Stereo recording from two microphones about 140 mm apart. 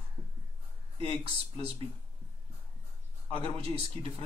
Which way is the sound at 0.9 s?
40° right (ahead or behind).